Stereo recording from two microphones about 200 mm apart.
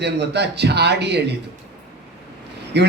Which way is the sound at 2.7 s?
55° right (ahead or behind).